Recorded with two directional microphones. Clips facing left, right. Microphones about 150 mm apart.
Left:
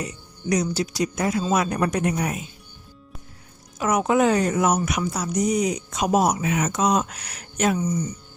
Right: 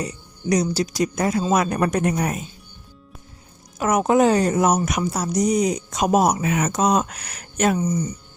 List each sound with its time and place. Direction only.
0.0 s speech: 35° right (ahead or behind)
3.8 s speech: 50° right (ahead or behind)